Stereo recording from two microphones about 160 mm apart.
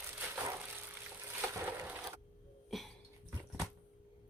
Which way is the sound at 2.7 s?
Centre (ahead or behind).